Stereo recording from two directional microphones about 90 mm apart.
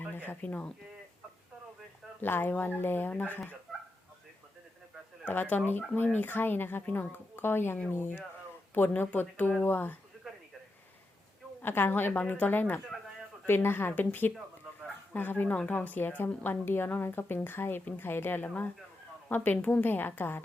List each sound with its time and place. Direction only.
0.1 s speech: 20° left (ahead or behind)
2.2 s a woman's voice: 25° left (ahead or behind)
5.2 s a woman's voice: 20° left (ahead or behind)
11.6 s a woman's voice: 25° left (ahead or behind)